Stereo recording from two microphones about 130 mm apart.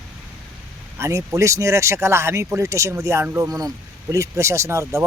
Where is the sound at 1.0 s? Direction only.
20° right (ahead or behind).